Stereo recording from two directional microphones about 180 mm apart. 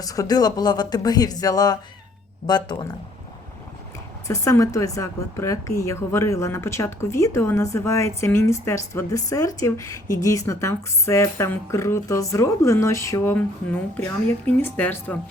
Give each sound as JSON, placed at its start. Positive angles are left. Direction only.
{"t": 0.0, "sound": "speech", "side_deg": 20}
{"t": 4.3, "sound": "a woman's voice", "side_deg": 15}